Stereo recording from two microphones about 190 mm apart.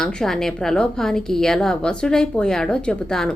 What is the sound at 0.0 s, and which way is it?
A woman's voice, 5° left (ahead or behind).